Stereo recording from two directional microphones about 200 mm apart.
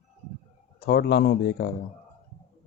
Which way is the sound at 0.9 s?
55° left (ahead or behind).